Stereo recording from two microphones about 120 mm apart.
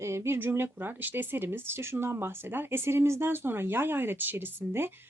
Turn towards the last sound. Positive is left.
turn(degrees=-20)  # may be behind; listen again after turning